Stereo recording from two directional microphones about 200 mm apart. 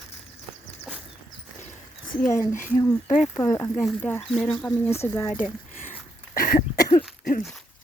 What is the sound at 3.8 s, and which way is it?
Speech, 5° left (ahead or behind).